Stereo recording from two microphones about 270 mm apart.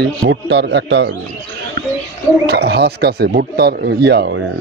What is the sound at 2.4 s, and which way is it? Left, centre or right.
Speech, right.